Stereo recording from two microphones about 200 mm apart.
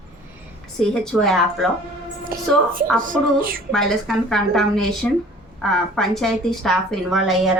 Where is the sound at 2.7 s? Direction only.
45° right (ahead or behind).